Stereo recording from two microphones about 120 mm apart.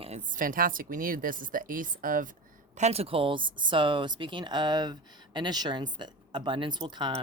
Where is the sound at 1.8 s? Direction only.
90° right.